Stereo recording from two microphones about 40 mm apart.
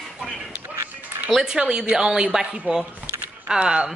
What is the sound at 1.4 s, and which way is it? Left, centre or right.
Speech, centre.